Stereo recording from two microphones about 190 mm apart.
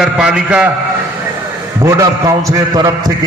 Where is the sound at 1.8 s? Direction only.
15° right (ahead or behind).